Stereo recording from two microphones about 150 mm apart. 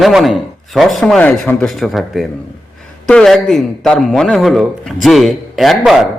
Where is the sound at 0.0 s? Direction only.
Centre (ahead or behind).